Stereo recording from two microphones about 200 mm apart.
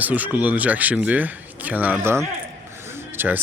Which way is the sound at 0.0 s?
10° right (ahead or behind).